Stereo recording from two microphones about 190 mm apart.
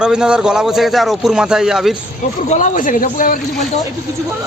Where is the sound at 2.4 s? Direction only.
40° left (ahead or behind).